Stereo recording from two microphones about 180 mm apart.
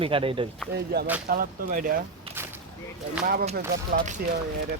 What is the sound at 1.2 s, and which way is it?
Speech, 50° right (ahead or behind).